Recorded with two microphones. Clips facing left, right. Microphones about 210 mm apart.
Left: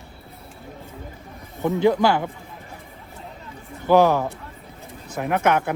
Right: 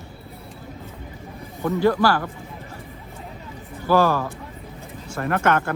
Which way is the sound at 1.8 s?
20° left (ahead or behind).